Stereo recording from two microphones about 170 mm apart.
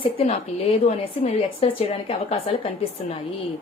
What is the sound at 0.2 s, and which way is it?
A woman's voice, 35° left (ahead or behind).